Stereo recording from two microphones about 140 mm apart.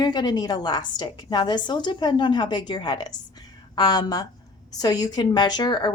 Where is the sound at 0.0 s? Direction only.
30° left (ahead or behind).